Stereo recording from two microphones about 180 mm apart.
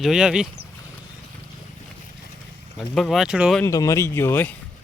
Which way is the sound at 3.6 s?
15° left (ahead or behind).